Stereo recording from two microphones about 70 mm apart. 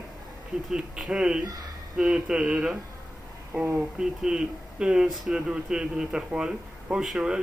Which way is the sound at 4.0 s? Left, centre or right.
Centre.